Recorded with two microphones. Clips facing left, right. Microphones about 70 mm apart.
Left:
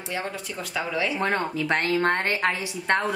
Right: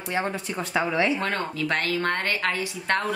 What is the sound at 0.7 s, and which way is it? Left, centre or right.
Speech, right.